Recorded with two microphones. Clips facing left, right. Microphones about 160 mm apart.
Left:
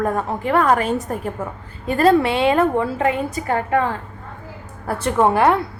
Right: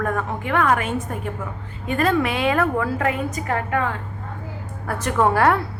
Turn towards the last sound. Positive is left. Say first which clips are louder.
# left 2 dB
turn(degrees=20)  # may be behind; listen again after turning